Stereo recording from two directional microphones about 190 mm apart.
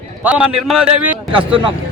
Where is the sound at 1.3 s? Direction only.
25° right (ahead or behind).